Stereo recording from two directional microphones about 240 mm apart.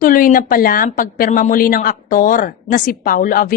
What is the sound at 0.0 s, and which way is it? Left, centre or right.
A woman's voice, left.